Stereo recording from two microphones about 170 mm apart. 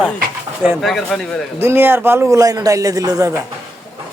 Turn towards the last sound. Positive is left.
turn(degrees=-20)  # may be behind; listen again after turning